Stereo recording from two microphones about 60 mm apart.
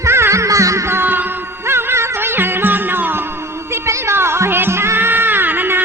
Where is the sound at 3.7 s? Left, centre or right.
Right.